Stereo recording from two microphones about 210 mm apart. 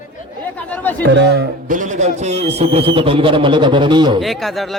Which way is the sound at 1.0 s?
55° right (ahead or behind).